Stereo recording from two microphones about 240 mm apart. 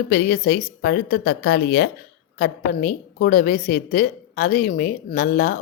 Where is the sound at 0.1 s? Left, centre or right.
Left.